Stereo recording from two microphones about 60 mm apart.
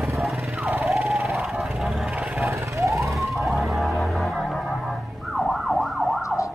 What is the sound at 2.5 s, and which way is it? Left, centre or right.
Police car, right.